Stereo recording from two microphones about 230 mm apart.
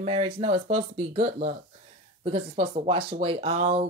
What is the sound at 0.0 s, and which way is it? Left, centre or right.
Speech, right.